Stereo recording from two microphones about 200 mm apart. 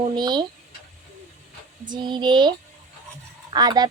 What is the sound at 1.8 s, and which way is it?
Speech, 20° right (ahead or behind).